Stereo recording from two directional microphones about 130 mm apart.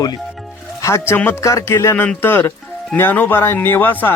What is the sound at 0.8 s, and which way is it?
Speech, 20° left (ahead or behind).